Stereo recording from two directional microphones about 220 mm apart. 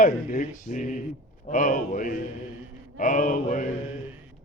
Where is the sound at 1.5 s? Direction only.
35° left (ahead or behind).